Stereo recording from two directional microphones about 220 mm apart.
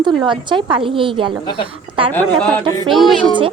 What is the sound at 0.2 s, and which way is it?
A woman's voice, 20° right (ahead or behind).